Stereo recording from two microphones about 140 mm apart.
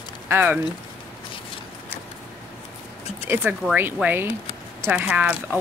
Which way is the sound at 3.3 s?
15° right (ahead or behind).